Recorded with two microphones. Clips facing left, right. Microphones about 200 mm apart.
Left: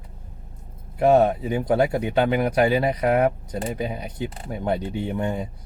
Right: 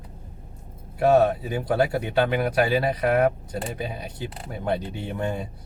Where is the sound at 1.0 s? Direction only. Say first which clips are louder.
Left 1 dB; 20° left (ahead or behind).